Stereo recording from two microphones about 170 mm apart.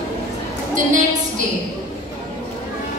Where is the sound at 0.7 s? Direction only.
45° right (ahead or behind).